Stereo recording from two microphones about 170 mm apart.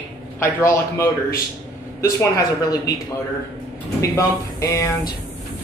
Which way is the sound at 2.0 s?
20° left (ahead or behind).